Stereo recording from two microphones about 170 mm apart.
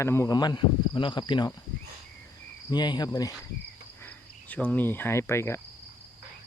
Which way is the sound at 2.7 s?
25° left (ahead or behind).